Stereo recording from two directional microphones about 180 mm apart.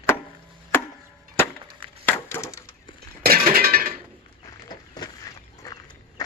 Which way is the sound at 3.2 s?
55° right (ahead or behind).